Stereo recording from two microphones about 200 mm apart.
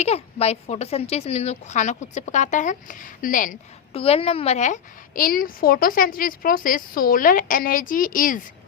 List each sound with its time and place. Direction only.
0.0 s a woman's voice: 30° left (ahead or behind)
3.9 s a woman's voice: 30° left (ahead or behind)